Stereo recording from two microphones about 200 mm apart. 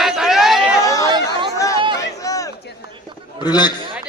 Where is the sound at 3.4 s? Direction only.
20° left (ahead or behind).